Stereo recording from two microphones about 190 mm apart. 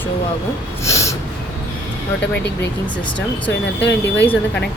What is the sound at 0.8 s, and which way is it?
Snort, 15° left (ahead or behind).